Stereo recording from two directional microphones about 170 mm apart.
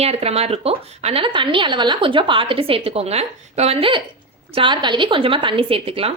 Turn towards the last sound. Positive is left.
turn(degrees=-35)  # may be behind; listen again after turning